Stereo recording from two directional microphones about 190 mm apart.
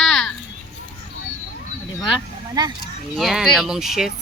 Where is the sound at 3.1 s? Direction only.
Centre (ahead or behind).